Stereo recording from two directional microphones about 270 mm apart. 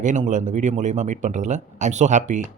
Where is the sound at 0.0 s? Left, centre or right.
Right.